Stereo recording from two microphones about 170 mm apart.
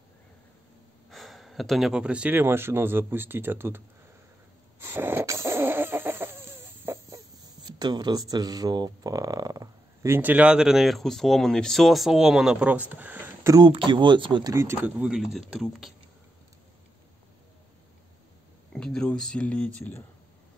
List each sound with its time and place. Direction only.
1.1 s speech: centre (ahead or behind)
4.7 s a sound: 15° right (ahead or behind)
7.6 s speech: 25° right (ahead or behind)
13.7 s speech: 30° right (ahead or behind); by 15.9 s centre (ahead or behind)
18.7 s speech: 5° left (ahead or behind)